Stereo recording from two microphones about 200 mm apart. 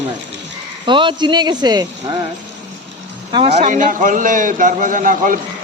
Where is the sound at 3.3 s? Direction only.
30° right (ahead or behind).